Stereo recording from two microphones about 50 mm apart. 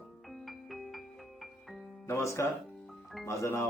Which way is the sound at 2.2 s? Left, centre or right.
Left.